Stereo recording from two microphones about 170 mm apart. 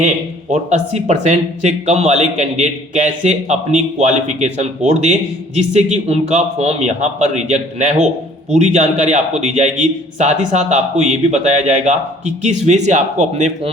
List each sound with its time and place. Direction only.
0.5 s a man's voice: 45° right (ahead or behind)